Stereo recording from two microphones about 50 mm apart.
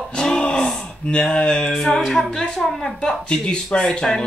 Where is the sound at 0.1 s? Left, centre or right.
Centre.